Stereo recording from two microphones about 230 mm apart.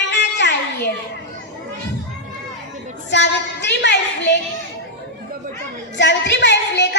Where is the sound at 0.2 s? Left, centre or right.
Left.